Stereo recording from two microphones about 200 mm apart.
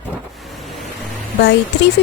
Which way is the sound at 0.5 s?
Centre (ahead or behind).